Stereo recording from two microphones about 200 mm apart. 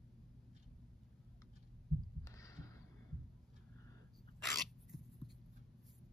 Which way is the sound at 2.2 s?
15° left (ahead or behind).